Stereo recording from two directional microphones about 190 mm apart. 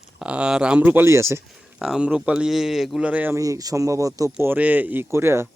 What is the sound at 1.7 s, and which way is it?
Speech, centre (ahead or behind).